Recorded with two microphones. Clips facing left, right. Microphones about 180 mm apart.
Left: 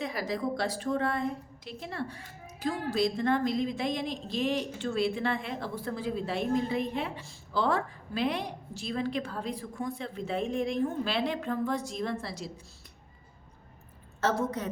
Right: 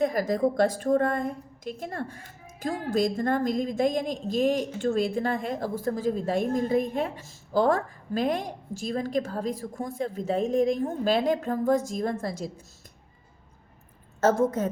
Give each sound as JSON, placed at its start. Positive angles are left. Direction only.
{"t": 0.0, "sound": "a woman's voice", "side_deg": -45}
{"t": 14.2, "sound": "a woman's voice", "side_deg": -45}